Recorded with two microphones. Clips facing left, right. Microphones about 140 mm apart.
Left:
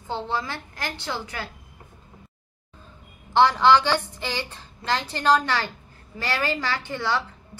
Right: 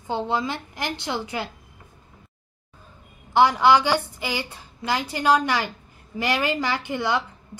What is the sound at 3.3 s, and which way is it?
A woman's voice, 10° right (ahead or behind).